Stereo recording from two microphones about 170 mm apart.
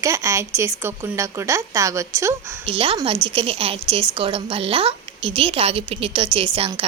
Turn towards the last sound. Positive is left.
turn(degrees=-35)  # may be behind; listen again after turning